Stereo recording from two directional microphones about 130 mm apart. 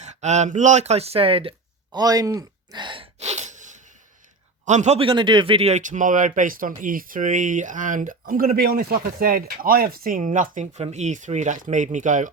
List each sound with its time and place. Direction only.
0.0 s speech: 60° right (ahead or behind); by 3.1 s 40° right (ahead or behind)
3.2 s a sound: 60° right (ahead or behind)
4.6 s a man's voice: 65° right (ahead or behind)
4.9 s speech: 40° right (ahead or behind); by 12.3 s 75° right (ahead or behind)